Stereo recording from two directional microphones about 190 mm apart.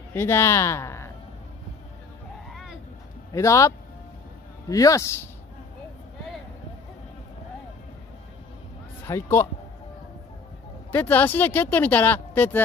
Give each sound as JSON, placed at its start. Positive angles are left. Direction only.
{"t": 0.1, "sound": "speech", "side_deg": 15}
{"t": 2.5, "sound": "vehicle", "side_deg": 0}
{"t": 3.3, "sound": "speech", "side_deg": 15}
{"t": 9.0, "sound": "speech", "side_deg": 15}
{"t": 10.9, "sound": "speech", "side_deg": 10}